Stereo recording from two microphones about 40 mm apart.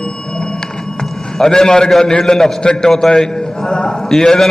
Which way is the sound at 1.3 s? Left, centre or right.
Centre.